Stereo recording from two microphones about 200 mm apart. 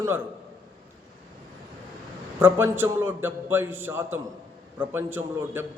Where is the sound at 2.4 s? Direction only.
10° right (ahead or behind).